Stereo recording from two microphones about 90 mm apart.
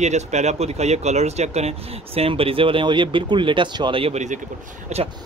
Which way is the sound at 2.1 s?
90° right.